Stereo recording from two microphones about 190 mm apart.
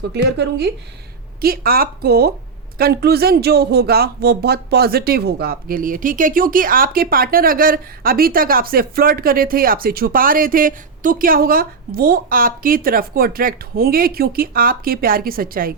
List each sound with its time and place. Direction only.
0.1 s speech: 60° right (ahead or behind)
1.4 s speech: 50° right (ahead or behind)